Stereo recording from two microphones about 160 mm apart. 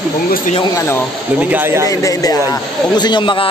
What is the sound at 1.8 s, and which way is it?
Speech, 20° left (ahead or behind).